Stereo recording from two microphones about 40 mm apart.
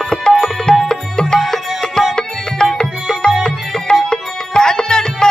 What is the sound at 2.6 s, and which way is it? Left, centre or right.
Music, left.